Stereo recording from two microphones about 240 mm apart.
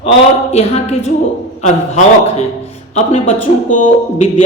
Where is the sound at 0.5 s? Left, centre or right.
Left.